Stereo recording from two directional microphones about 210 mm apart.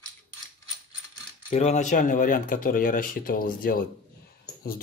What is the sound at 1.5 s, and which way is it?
Speech, 35° left (ahead or behind).